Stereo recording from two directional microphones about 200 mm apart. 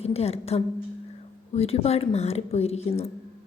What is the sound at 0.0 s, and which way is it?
A woman's voice, 30° left (ahead or behind).